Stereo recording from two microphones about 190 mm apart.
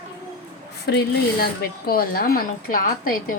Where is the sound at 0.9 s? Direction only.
55° left (ahead or behind).